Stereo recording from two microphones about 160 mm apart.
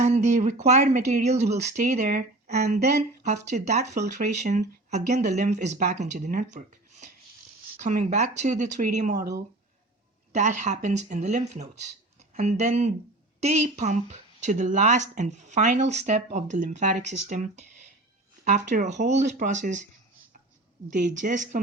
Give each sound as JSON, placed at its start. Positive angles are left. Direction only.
{"t": 0.0, "sound": "speech", "side_deg": -45}
{"t": 10.3, "sound": "speech", "side_deg": -50}
{"t": 20.9, "sound": "speech", "side_deg": -50}